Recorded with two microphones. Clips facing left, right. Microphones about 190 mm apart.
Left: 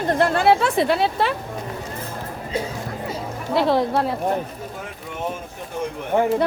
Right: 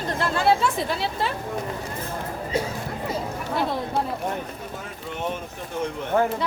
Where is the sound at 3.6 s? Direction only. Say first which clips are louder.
Left 7 dB; 80° left.